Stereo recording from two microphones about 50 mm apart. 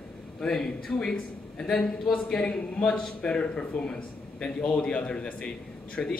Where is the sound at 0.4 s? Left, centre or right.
Centre.